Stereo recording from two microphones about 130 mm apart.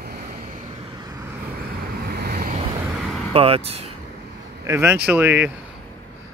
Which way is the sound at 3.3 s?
45° right (ahead or behind).